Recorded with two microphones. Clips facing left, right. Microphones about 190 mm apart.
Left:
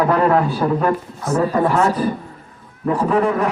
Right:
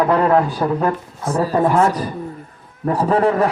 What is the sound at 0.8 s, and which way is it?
Speech, 30° right (ahead or behind).